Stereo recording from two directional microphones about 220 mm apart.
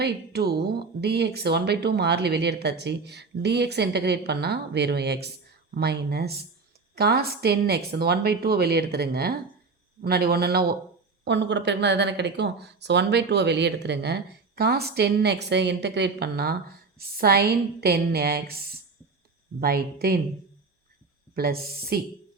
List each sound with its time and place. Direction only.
0.0 s speech: 45° right (ahead or behind)
21.3 s speech: 45° right (ahead or behind)